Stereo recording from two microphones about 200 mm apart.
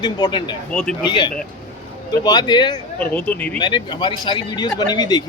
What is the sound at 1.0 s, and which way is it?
Speech, 25° left (ahead or behind).